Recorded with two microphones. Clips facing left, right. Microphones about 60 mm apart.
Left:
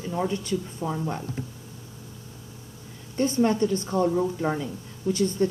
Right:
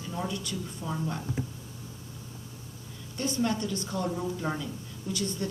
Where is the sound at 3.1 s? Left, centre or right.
Left.